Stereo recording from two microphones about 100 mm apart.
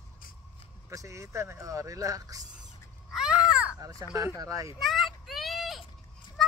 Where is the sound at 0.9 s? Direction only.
30° right (ahead or behind).